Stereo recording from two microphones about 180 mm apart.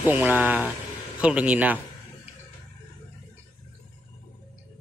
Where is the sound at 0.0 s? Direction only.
10° right (ahead or behind).